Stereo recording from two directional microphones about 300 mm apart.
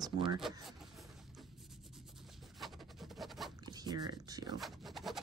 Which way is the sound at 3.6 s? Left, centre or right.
Centre.